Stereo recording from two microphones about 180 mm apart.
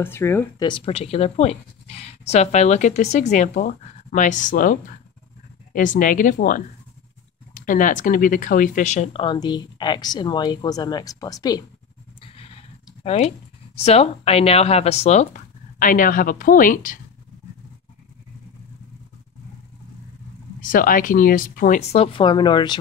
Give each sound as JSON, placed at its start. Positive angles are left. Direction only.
{"t": 0.0, "sound": "speech", "side_deg": 15}
{"t": 0.7, "sound": "speech", "side_deg": 30}
{"t": 12.2, "sound": "vehicle", "side_deg": 35}
{"t": 13.0, "sound": "speech", "side_deg": 35}
{"t": 20.6, "sound": "speech", "side_deg": 50}